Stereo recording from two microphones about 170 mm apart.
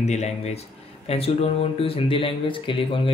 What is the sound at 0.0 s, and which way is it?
Speech, 40° left (ahead or behind).